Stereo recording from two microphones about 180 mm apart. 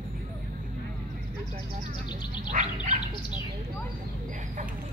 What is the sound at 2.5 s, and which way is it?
Bird, 40° right (ahead or behind).